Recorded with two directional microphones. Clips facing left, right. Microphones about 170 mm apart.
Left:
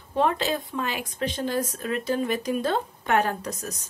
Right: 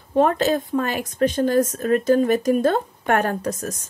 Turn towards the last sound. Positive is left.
turn(degrees=-50)  # may be behind; listen again after turning